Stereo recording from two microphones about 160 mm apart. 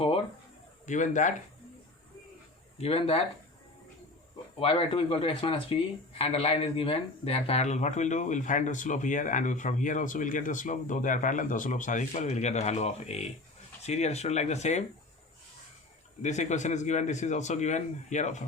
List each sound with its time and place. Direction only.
0.9 s speech: 50° left (ahead or behind)
2.7 s speech: 40° left (ahead or behind)
4.6 s speech: 35° left (ahead or behind)
16.2 s speech: 45° left (ahead or behind)